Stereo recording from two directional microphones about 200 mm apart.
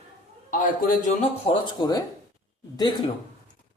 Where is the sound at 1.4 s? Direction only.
25° left (ahead or behind).